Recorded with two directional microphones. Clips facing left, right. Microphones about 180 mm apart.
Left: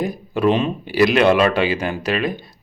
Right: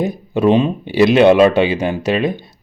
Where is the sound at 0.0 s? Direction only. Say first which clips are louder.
Right 3 dB; 25° right (ahead or behind).